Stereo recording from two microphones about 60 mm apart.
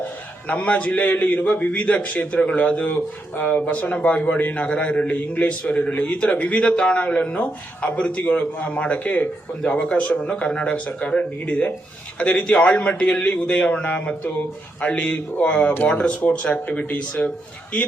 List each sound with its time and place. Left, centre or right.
0.0 s a man's voice: left
13.2 s a man's voice: left
13.6 s a man's voice: centre